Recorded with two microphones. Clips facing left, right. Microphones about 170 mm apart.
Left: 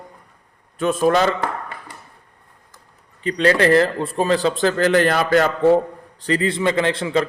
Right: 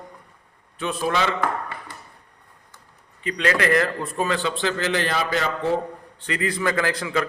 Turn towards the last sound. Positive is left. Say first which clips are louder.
# left 5 dB
turn(degrees=30)  # may be behind; listen again after turning